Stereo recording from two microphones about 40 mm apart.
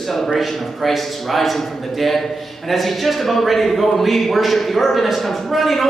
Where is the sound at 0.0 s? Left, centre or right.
Centre.